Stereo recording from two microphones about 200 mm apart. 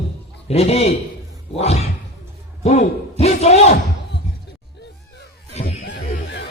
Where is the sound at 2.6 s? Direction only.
35° left (ahead or behind).